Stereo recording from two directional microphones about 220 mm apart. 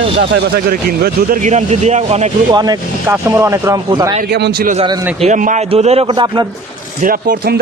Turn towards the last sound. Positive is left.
turn(degrees=-40)  # may be behind; listen again after turning